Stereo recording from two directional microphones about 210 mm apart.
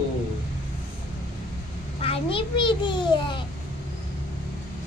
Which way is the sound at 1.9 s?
25° left (ahead or behind).